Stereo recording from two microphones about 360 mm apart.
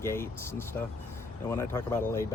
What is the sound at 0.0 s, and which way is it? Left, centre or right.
Speech, centre.